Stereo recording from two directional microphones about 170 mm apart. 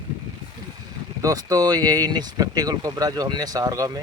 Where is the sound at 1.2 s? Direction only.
20° right (ahead or behind).